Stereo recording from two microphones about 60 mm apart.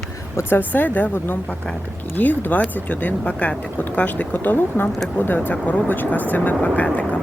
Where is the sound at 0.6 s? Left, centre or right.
Left.